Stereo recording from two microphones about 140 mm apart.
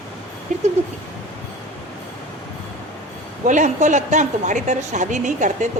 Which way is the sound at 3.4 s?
60° right (ahead or behind).